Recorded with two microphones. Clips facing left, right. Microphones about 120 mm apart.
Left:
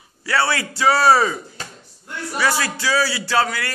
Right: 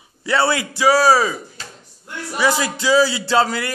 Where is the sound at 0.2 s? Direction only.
20° right (ahead or behind).